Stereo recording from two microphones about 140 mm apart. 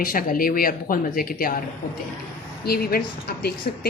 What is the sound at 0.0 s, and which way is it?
Speech, 90° left.